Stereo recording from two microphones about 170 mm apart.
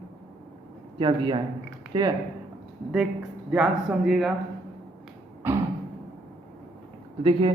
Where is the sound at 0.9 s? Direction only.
30° right (ahead or behind).